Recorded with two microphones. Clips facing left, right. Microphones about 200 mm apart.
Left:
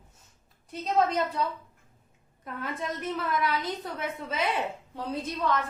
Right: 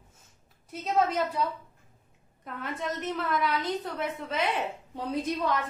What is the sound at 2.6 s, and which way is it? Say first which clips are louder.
A woman's voice: even; centre (ahead or behind).